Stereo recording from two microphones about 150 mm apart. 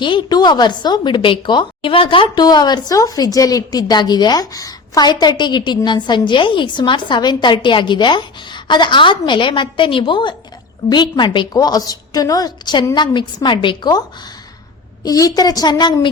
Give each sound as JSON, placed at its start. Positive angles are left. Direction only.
{"t": 0.0, "sound": "a woman's voice", "side_deg": 30}
{"t": 15.0, "sound": "a woman's voice", "side_deg": 25}